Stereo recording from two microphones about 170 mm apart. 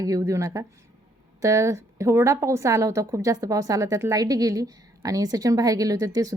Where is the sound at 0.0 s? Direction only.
20° right (ahead or behind).